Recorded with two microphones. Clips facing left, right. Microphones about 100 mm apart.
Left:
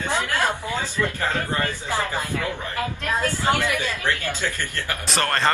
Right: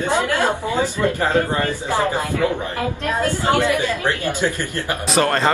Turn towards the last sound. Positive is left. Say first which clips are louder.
# right 5 dB
turn(degrees=-5)  # may be behind; listen again after turning